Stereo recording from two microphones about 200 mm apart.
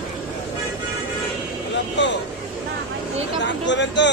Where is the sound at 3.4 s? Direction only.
65° left (ahead or behind).